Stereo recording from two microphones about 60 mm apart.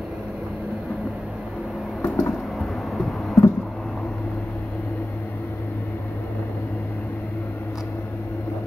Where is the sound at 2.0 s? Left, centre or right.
Left.